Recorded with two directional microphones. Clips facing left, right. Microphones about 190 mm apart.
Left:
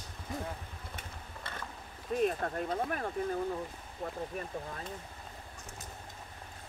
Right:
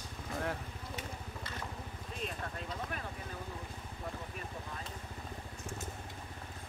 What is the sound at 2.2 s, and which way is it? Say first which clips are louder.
Speech: left 8 dB; 55° left (ahead or behind).